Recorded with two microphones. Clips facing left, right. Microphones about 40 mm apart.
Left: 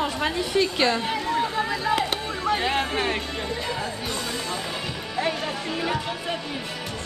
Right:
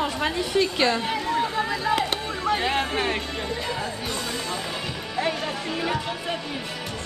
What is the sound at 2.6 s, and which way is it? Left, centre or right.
Speech, centre.